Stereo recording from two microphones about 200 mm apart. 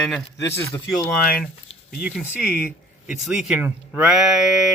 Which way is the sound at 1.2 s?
45° left (ahead or behind).